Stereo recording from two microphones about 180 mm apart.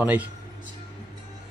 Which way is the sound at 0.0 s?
10° right (ahead or behind).